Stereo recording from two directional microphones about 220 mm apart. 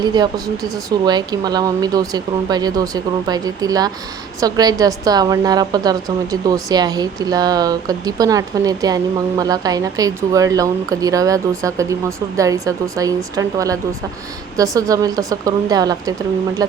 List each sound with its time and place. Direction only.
0.0 s a woman's voice: 20° right (ahead or behind)